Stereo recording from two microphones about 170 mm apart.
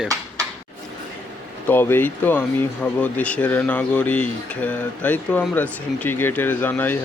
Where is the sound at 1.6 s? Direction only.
10° left (ahead or behind).